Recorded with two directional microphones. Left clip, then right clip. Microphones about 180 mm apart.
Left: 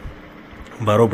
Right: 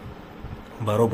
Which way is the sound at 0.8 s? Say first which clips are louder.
Left 6 dB; 15° left (ahead or behind).